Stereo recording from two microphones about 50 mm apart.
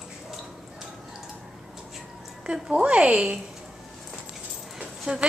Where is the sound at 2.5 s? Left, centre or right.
Right.